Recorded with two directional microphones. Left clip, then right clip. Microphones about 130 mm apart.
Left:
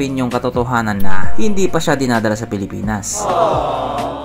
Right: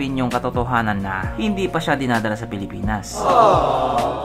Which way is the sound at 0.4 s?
55° left (ahead or behind).